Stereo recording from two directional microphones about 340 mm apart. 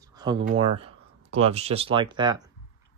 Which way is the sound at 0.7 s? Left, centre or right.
Centre.